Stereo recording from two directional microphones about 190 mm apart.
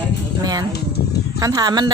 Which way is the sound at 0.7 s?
60° left (ahead or behind).